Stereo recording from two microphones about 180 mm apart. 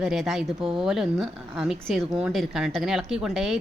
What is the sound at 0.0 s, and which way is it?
Speech, centre (ahead or behind).